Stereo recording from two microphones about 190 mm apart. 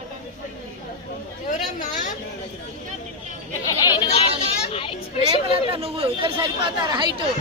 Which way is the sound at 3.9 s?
30° left (ahead or behind).